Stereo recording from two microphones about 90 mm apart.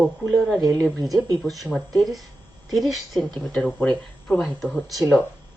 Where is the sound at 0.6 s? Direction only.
40° right (ahead or behind).